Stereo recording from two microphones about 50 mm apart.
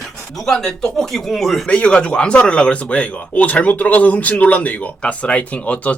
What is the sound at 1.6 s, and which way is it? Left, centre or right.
Speech, left.